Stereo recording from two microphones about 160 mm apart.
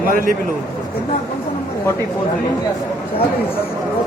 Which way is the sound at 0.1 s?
60° right (ahead or behind).